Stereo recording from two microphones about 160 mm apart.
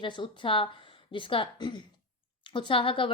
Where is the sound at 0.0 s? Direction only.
30° left (ahead or behind).